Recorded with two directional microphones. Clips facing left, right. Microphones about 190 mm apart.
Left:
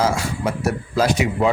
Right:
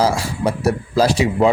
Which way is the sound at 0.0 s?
35° right (ahead or behind).